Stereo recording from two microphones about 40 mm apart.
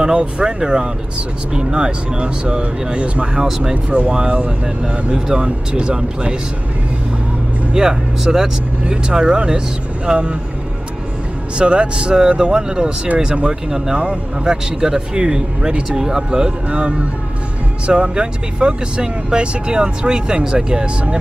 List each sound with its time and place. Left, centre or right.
0.0 s speech: right
3.3 s speech: centre
3.7 s speech: right
7.7 s speech: centre
11.5 s speech: right
13.5 s speech: centre
13.9 s speech: right